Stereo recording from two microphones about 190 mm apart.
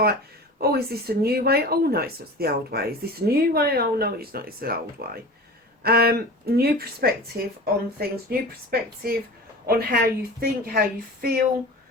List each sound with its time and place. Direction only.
0.6 s speech: 55° right (ahead or behind)